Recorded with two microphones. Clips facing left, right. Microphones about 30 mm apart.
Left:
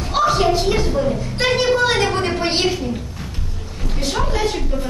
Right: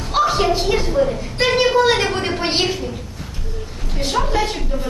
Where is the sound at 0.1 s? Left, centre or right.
Centre.